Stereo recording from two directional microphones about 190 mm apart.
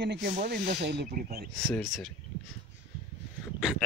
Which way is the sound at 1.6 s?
Centre (ahead or behind).